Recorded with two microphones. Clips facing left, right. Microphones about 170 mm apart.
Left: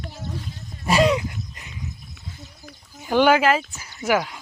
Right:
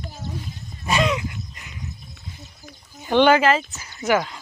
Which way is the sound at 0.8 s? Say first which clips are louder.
Left 3 dB; 35° left (ahead or behind).